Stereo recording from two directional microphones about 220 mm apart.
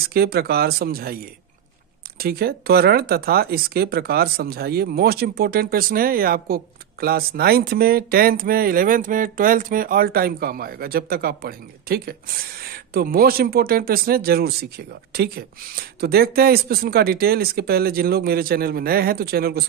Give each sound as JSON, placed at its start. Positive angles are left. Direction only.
{"t": 0.1, "sound": "speech", "side_deg": -45}